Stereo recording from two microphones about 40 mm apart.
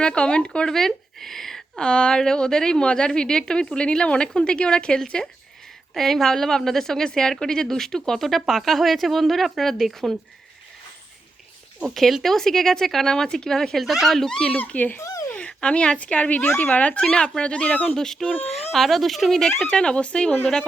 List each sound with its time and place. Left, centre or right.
0.0 s a woman's voice: left
0.7 s a sound: centre
1.8 s a woman's voice: left; by 10.2 s centre
12.2 s a woman's voice: centre
13.8 s speech: centre
14.3 s a woman's voice: centre
17.9 s a woman's voice: centre
18.3 s speech: left
18.5 s speech: centre
19.7 s a woman's voice: left